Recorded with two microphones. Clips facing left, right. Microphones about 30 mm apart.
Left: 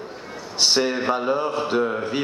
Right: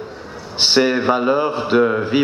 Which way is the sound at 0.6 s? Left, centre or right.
Right.